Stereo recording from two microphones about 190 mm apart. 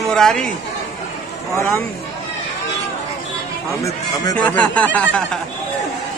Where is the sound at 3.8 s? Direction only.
15° left (ahead or behind).